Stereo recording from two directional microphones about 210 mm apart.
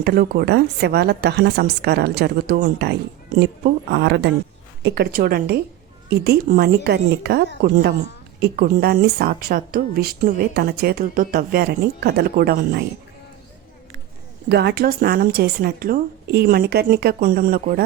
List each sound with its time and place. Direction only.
0.0 s speech: 45° right (ahead or behind)
14.5 s speech: 55° right (ahead or behind)